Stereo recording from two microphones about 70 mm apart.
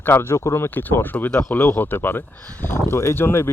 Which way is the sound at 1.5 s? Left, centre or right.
Left.